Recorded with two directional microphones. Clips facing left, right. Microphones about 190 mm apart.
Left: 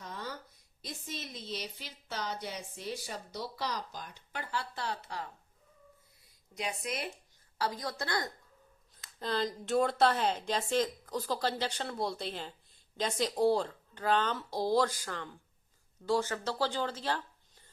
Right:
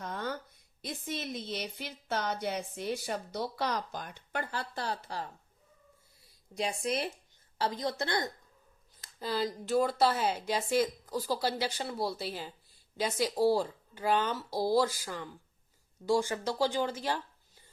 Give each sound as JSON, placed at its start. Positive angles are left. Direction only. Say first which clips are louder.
{"t": 0.0, "sound": "a sound", "louder": "right 6 dB", "side_deg": -55}
{"t": 0.8, "sound": "a woman's voice", "louder": "right 5 dB", "side_deg": -55}
{"t": 6.6, "sound": "a woman's voice", "louder": "right 5 dB", "side_deg": -30}
{"t": 9.1, "sound": "speech", "louder": "right 1 dB", "side_deg": -5}